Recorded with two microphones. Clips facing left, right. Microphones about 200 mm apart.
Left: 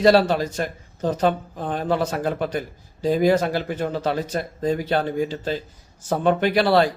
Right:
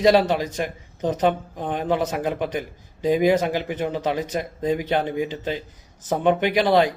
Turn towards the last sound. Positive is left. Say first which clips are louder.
# even
turn(degrees=-15)  # may be behind; listen again after turning